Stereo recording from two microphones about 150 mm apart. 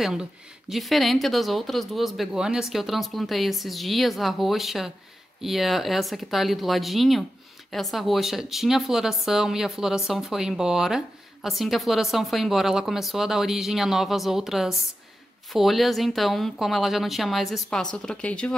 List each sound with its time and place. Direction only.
0.0 s speech: 5° right (ahead or behind)